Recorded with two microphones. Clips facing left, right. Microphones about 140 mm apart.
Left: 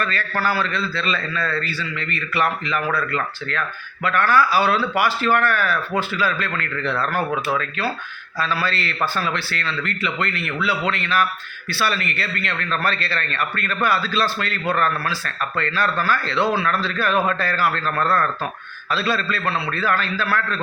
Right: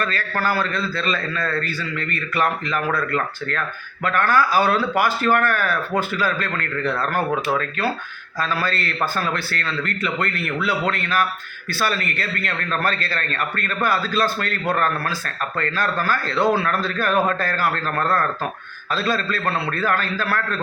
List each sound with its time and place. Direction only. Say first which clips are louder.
0.0 s a man's voice: even; 40° right (ahead or behind)